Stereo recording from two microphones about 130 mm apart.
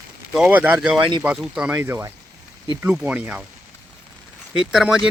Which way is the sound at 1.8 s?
20° right (ahead or behind).